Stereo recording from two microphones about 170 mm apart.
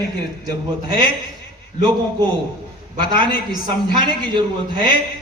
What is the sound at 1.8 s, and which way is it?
Speech, 25° right (ahead or behind).